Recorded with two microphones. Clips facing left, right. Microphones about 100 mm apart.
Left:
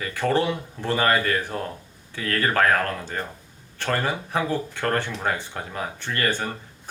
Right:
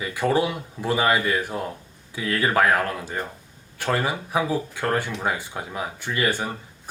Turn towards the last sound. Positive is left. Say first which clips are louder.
# right 1 dB
turn(degrees=-10)  # may be behind; listen again after turning